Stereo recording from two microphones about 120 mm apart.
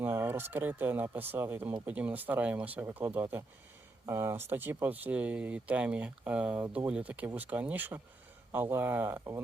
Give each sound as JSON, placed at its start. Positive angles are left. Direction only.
{"t": 0.0, "sound": "speech", "side_deg": -20}